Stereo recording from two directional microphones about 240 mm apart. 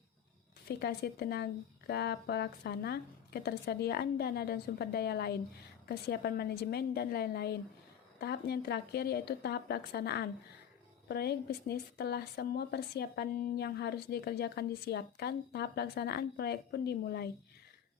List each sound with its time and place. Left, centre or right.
0.7 s a woman's voice: left